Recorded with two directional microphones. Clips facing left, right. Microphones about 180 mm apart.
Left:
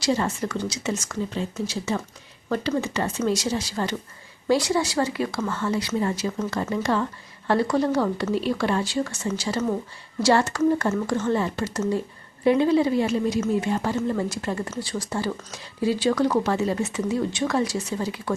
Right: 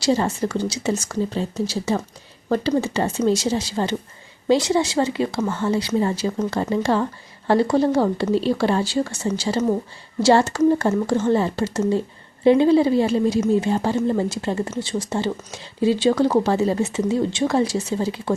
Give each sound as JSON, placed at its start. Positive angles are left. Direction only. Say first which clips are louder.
{"t": 0.0, "sound": "speech", "louder": "right 4 dB", "side_deg": -30}